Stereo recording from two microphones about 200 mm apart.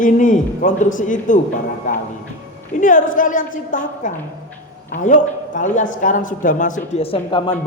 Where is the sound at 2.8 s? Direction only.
40° left (ahead or behind).